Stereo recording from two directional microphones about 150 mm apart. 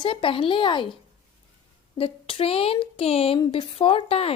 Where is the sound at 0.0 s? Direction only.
35° left (ahead or behind).